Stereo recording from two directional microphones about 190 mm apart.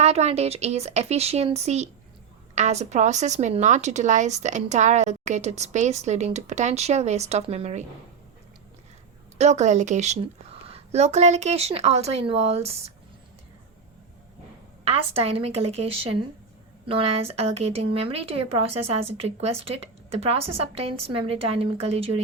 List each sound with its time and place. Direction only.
0.0 s speech: 35° right (ahead or behind)
9.4 s speech: 35° right (ahead or behind)
14.8 s speech: 30° right (ahead or behind)